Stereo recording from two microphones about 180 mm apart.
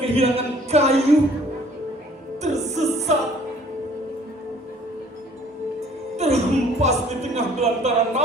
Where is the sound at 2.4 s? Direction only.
40° right (ahead or behind).